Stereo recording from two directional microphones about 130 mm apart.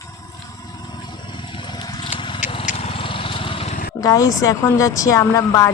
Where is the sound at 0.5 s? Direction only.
30° left (ahead or behind).